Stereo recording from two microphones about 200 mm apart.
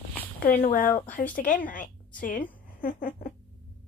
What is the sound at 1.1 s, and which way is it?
A woman's voice, 45° left (ahead or behind).